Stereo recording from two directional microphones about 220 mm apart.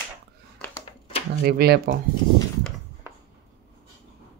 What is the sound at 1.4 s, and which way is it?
Speech, 45° right (ahead or behind).